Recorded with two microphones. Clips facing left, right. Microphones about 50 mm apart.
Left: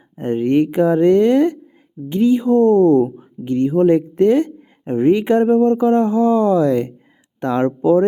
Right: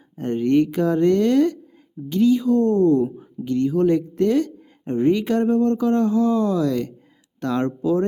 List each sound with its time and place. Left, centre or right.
0.2 s speech: centre